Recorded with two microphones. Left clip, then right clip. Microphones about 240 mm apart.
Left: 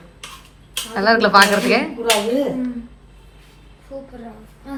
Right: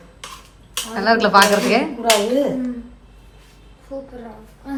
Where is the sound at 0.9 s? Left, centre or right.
Centre.